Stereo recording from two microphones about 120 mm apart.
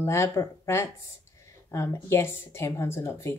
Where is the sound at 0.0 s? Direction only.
25° left (ahead or behind).